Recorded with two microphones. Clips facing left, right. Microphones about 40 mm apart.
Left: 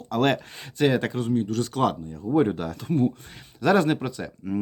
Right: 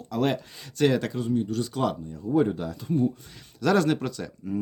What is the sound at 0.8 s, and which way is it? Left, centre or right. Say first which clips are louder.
Speech: left 1 dB; centre.